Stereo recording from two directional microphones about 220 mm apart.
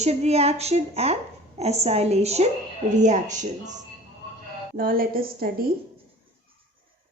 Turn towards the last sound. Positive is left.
turn(degrees=-40)  # may be behind; listen again after turning